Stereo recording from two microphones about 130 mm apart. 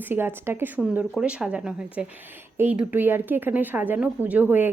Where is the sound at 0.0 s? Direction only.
15° right (ahead or behind).